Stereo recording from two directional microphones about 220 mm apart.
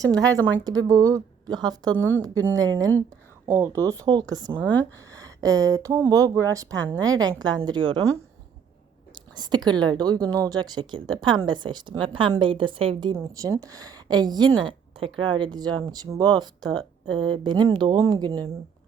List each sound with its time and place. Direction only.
0.0 s speech: 15° right (ahead or behind)
4.6 s speech: 5° left (ahead or behind)
5.1 s a woman's voice: 15° right (ahead or behind)
9.1 s whispering: 20° right (ahead or behind)
9.6 s a woman's voice: 20° right (ahead or behind)